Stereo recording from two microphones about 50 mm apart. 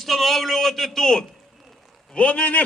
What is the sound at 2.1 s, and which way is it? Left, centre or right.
Speech, left.